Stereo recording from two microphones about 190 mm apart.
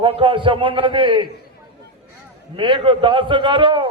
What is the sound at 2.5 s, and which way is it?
A man's voice, 25° right (ahead or behind).